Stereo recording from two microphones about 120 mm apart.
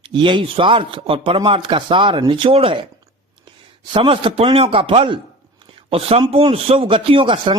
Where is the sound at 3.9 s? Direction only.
45° right (ahead or behind).